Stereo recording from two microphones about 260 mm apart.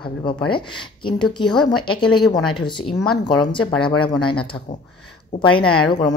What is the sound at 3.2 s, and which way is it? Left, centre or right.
Speech, centre.